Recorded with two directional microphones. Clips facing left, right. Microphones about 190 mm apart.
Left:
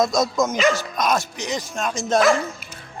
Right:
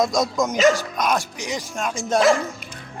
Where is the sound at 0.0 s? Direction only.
15° right (ahead or behind).